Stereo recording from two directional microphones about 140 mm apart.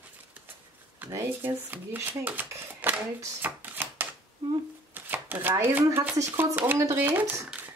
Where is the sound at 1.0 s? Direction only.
15° right (ahead or behind).